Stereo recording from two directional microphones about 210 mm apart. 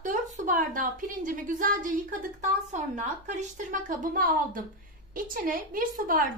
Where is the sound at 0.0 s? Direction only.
40° right (ahead or behind).